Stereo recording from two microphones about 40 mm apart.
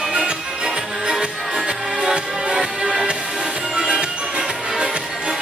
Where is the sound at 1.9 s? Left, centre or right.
Centre.